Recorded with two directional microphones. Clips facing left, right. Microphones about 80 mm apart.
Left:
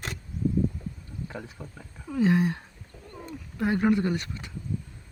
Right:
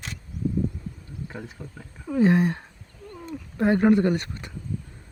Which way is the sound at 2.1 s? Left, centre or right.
Right.